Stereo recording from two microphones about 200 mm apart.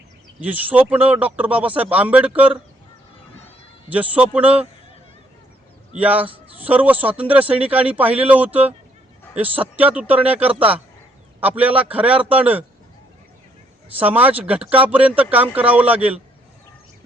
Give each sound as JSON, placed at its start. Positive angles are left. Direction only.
{"t": 0.3, "sound": "a man's voice", "side_deg": -10}
{"t": 3.8, "sound": "a man's voice", "side_deg": -5}
{"t": 6.0, "sound": "a man's voice", "side_deg": -10}
{"t": 14.0, "sound": "a man's voice", "side_deg": -10}